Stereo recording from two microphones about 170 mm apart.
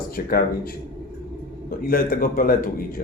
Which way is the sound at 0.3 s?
60° left (ahead or behind).